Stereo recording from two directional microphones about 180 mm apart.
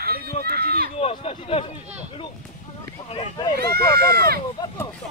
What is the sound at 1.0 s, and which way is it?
Speech, 35° left (ahead or behind).